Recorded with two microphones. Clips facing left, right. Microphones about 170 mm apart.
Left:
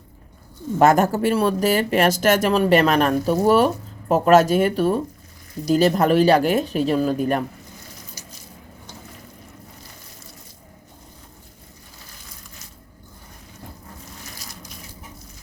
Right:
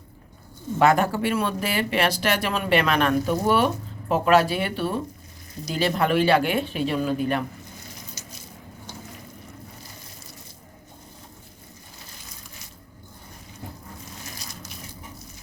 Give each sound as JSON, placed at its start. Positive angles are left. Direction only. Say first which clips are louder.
{"t": 0.8, "sound": "speech", "louder": "left 4 dB", "side_deg": 45}